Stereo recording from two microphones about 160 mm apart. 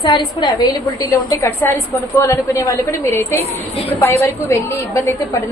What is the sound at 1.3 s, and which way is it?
A woman's voice, 15° left (ahead or behind).